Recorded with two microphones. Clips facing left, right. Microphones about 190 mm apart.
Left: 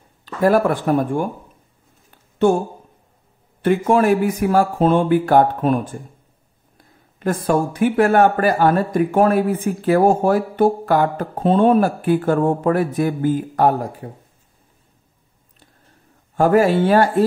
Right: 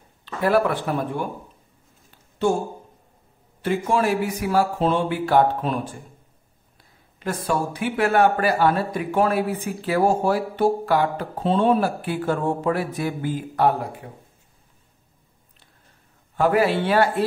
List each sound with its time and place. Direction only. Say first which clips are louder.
0.2 s a man's voice: left 4 dB; 45° left (ahead or behind)
2.0 s a sound: left 6 dB; 60° left (ahead or behind)
3.6 s a man's voice: left 6 dB; 55° left (ahead or behind)
16.3 s a man's voice: left 5 dB; 45° left (ahead or behind)